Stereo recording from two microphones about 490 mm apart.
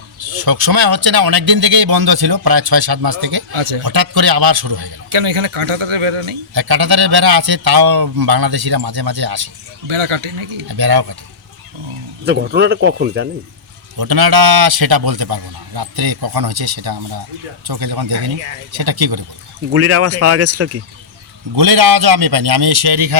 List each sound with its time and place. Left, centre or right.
0.4 s speech: right
3.5 s speech: right
3.8 s speech: right
5.0 s speech: right
6.5 s speech: right
9.8 s speech: right
10.7 s speech: right
12.2 s speech: centre
14.0 s speech: right
19.7 s speech: right
21.5 s speech: right